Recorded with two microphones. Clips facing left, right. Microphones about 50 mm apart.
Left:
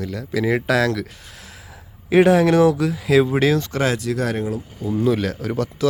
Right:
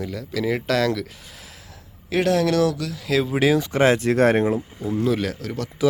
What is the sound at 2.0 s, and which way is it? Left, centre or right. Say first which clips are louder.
Speech: left 6 dB; centre.